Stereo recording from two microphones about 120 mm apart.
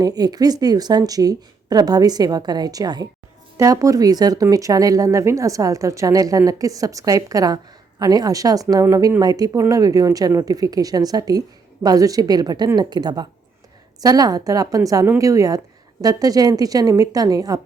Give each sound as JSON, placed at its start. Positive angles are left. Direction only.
{"t": 0.0, "sound": "a woman's voice", "side_deg": -35}